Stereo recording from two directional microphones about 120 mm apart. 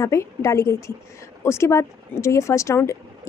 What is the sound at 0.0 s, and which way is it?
Speech, 25° left (ahead or behind).